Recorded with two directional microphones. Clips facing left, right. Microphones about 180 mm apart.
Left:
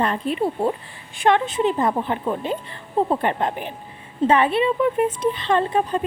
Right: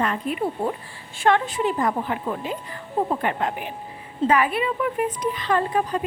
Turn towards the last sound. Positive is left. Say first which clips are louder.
# left 2 dB
turn(degrees=25)  # may be behind; listen again after turning